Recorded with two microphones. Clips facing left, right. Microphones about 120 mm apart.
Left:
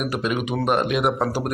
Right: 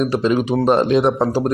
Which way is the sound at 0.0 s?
30° right (ahead or behind).